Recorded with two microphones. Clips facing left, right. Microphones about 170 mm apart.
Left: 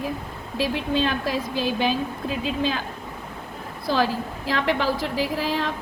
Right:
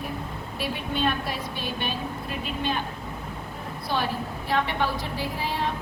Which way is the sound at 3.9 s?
90° left.